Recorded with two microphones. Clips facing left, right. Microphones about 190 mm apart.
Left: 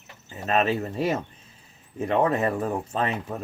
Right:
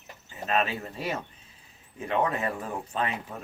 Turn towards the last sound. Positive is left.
turn(degrees=40)  # may be behind; listen again after turning